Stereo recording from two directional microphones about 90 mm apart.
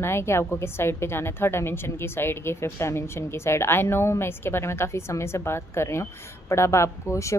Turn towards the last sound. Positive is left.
turn(degrees=30)  # may be behind; listen again after turning